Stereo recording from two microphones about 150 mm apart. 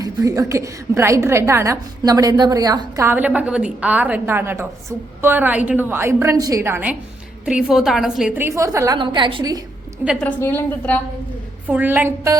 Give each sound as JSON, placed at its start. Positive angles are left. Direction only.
{"t": 0.0, "sound": "a woman's voice", "side_deg": -20}
{"t": 7.4, "sound": "a woman's voice", "side_deg": -5}
{"t": 8.4, "sound": "a woman's voice", "side_deg": -20}
{"t": 9.0, "sound": "a woman's voice", "side_deg": -30}
{"t": 10.2, "sound": "a woman's voice", "side_deg": 10}
{"t": 11.7, "sound": "a woman's voice", "side_deg": -10}